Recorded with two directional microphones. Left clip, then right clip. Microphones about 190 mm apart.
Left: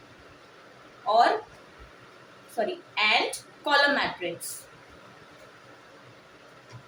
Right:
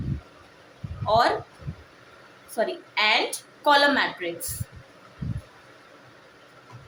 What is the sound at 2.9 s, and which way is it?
A woman's voice, 30° right (ahead or behind).